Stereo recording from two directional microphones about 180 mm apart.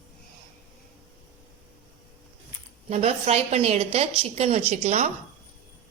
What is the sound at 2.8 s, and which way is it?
A woman's voice, 35° right (ahead or behind).